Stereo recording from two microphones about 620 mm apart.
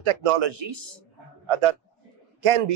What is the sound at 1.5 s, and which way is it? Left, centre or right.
Speech, right.